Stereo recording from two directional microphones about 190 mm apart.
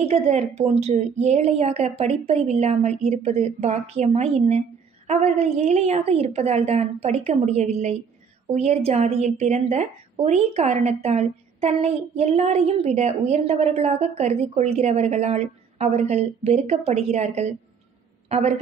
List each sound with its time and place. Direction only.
0.0 s a woman's voice: 35° right (ahead or behind)